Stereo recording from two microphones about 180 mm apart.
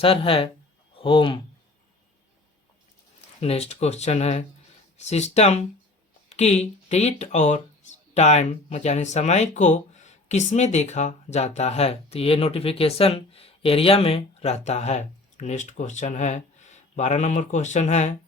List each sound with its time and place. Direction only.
0.0 s speech: 30° left (ahead or behind)
3.4 s speech: 35° left (ahead or behind)